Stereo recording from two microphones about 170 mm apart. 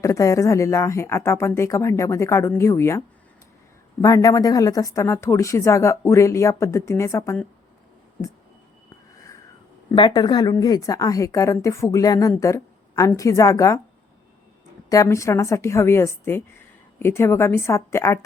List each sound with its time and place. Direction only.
0.0 s speech: 20° left (ahead or behind)
4.0 s speech: 20° left (ahead or behind)
9.9 s a woman's voice: 25° left (ahead or behind)
14.8 s speech: 20° left (ahead or behind)